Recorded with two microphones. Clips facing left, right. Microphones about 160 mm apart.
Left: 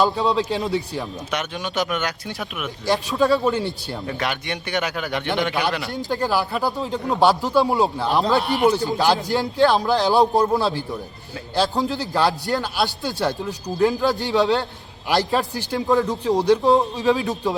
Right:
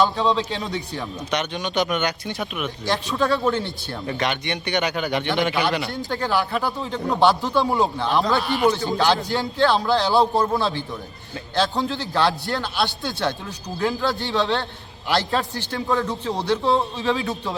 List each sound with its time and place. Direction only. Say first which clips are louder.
0.2 s a man's voice: left 1 dB; 5° left (ahead or behind)
5.9 s speech: left 1 dB; 15° left (ahead or behind)
8.2 s a man's voice: left 2 dB; 20° left (ahead or behind)